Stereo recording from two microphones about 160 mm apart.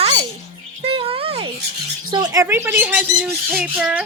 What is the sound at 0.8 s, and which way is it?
Music, 35° right (ahead or behind).